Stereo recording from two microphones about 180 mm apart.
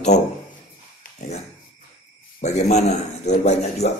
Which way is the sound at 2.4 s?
40° left (ahead or behind).